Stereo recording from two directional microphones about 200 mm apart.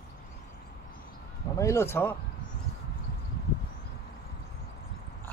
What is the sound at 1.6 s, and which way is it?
Speech, 15° left (ahead or behind).